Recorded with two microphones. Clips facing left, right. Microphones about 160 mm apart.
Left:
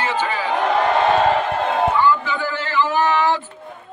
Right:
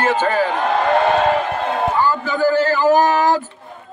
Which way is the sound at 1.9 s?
40° right (ahead or behind).